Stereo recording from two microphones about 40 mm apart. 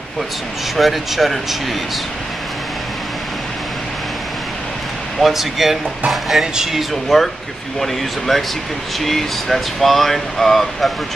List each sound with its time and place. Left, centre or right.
0.7 s speech: centre
5.2 s speech: centre
6.4 s speech: centre
6.7 s speech: centre